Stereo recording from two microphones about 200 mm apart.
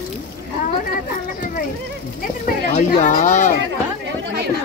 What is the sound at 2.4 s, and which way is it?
Speech, 40° left (ahead or behind).